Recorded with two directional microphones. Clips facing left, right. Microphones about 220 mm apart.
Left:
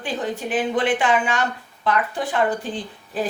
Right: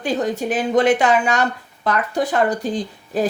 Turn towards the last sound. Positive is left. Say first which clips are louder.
# right 5 dB
turn(degrees=-40)  # may be behind; listen again after turning